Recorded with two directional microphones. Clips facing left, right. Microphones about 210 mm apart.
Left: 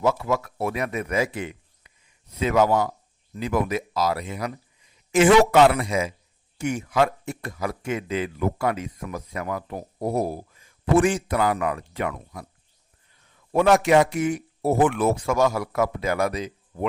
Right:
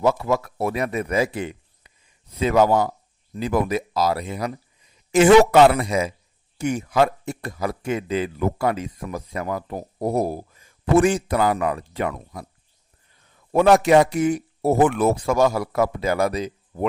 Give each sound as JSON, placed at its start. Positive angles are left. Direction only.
{"t": 0.0, "sound": "speech", "side_deg": -35}
{"t": 13.5, "sound": "speech", "side_deg": -40}